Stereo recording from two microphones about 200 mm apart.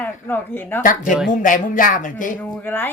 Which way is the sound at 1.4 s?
40° left (ahead or behind).